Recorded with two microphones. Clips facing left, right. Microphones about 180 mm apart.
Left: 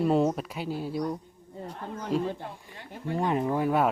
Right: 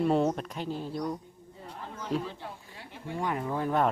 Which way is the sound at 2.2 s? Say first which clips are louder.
Left 7 dB; 50° left (ahead or behind).